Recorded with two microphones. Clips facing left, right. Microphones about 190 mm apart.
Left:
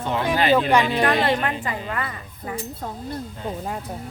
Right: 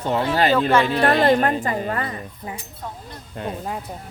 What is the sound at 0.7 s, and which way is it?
Speech, 15° left (ahead or behind).